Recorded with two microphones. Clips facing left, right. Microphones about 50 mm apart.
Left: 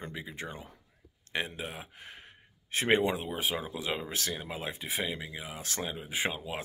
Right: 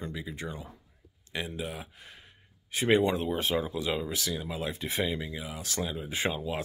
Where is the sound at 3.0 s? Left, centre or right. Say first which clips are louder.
Right 3 dB; centre.